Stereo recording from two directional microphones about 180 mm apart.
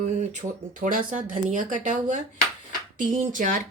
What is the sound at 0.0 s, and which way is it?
Speech, 40° right (ahead or behind).